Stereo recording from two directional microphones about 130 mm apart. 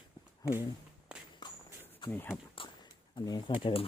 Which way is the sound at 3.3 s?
30° left (ahead or behind).